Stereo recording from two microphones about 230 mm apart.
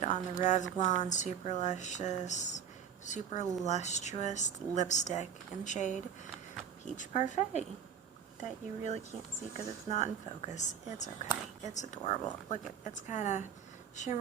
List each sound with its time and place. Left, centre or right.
0.0 s speech: left